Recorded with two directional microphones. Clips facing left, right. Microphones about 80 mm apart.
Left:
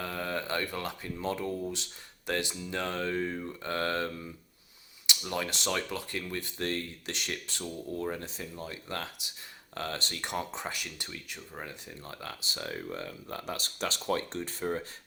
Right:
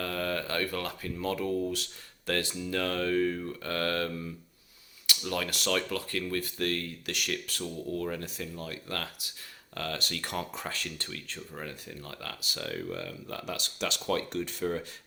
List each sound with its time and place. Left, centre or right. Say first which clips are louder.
0.0 s speech: right 2 dB; centre